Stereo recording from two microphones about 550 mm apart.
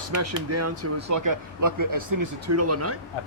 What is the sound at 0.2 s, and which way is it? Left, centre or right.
Speech, right.